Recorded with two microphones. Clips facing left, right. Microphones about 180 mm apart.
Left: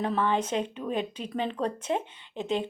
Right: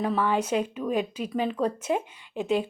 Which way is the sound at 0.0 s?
10° right (ahead or behind).